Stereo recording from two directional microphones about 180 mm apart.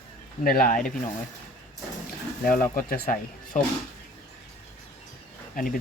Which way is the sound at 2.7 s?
50° left (ahead or behind).